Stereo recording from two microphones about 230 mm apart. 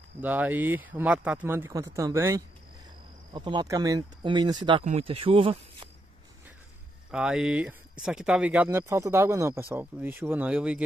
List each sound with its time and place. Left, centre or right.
0.2 s speech: centre; by 5.9 s right
7.1 s speech: centre